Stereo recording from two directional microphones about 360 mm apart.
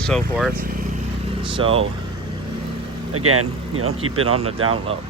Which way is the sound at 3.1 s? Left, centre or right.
Right.